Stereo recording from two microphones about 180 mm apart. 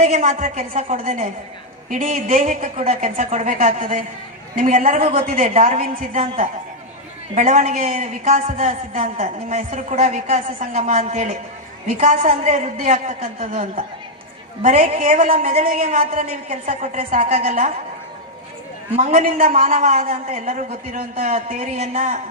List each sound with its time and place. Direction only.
0.0 s a man's voice: 40° right (ahead or behind)
18.9 s a man's voice: 45° right (ahead or behind)